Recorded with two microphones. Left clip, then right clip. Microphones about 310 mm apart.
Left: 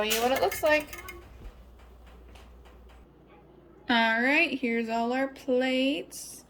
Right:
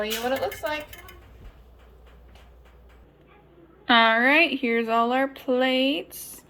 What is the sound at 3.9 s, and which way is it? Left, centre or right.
Speech, centre.